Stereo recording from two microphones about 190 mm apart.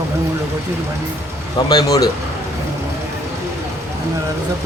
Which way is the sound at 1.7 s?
20° left (ahead or behind).